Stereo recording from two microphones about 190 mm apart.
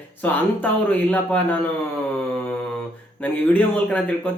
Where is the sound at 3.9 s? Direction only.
5° left (ahead or behind).